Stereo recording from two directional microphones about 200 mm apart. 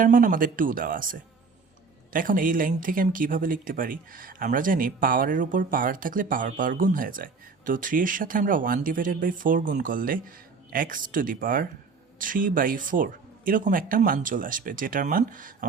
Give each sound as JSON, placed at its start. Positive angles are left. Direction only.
{"t": 0.0, "sound": "speech", "side_deg": -40}